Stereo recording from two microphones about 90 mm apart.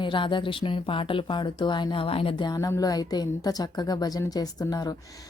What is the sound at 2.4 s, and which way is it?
A woman's voice, 45° left (ahead or behind).